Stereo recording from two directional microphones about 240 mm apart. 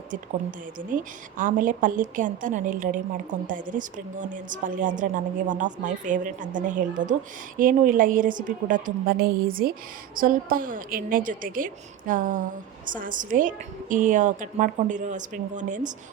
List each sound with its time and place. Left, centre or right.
0.8 s a woman's voice: right